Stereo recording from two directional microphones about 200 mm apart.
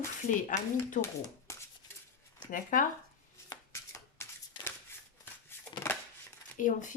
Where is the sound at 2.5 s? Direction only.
40° left (ahead or behind).